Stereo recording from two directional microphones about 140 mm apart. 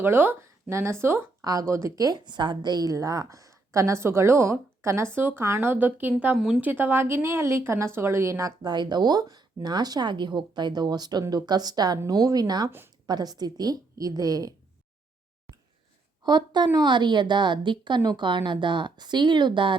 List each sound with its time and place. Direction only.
0.0 s a woman's voice: 15° right (ahead or behind)
16.2 s a woman's voice: 30° right (ahead or behind)